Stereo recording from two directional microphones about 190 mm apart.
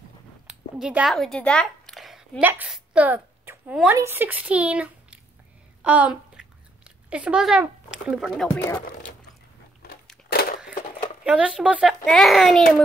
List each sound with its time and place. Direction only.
0.5 s speech: 5° right (ahead or behind)
5.8 s a sound: 5° right (ahead or behind)
7.1 s speech: 5° right (ahead or behind)
8.5 s speech: 15° left (ahead or behind)
11.2 s speech: 5° right (ahead or behind)